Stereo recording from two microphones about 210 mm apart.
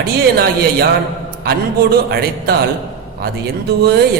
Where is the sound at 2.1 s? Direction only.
45° right (ahead or behind).